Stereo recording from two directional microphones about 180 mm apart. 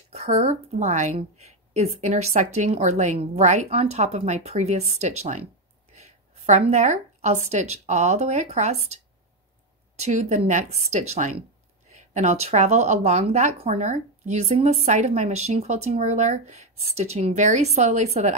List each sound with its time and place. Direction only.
0.1 s a woman's voice: 35° right (ahead or behind)